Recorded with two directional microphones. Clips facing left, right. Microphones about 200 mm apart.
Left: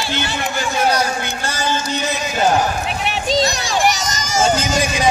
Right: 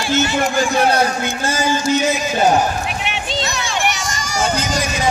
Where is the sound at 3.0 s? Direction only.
40° left (ahead or behind).